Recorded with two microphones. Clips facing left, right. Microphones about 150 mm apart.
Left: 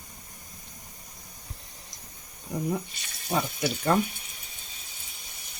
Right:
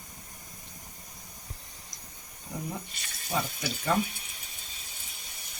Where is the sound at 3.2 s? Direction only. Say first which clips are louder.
Left 4 dB; 60° left (ahead or behind).